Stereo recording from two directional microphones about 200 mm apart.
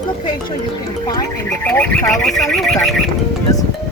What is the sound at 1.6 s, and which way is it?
Speech, 5° left (ahead or behind).